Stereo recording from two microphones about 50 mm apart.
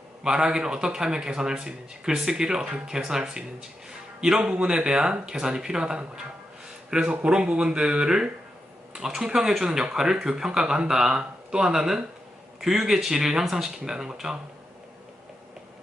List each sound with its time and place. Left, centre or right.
0.2 s a man's voice: centre